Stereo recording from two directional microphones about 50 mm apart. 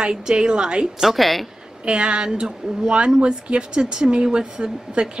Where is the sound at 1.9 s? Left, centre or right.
Centre.